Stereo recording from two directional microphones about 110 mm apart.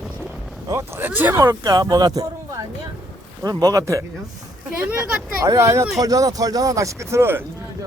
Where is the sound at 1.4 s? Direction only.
35° right (ahead or behind).